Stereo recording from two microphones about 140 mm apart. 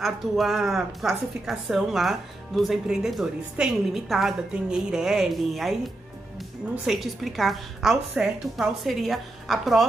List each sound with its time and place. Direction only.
0.0 s a woman's voice: centre (ahead or behind)
6.9 s a woman's voice: centre (ahead or behind)